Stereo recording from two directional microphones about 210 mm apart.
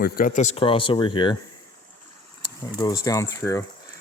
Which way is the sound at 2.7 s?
15° left (ahead or behind).